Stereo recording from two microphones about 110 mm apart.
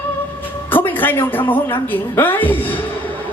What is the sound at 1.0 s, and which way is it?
A woman's voice, 20° left (ahead or behind).